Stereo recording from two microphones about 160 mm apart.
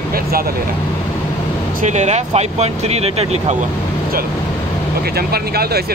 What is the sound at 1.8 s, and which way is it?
Speech, 45° right (ahead or behind).